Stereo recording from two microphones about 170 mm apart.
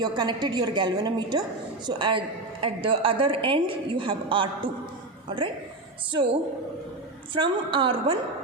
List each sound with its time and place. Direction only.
0.0 s a woman's voice: 25° right (ahead or behind)
6.1 s a woman's voice: 30° right (ahead or behind)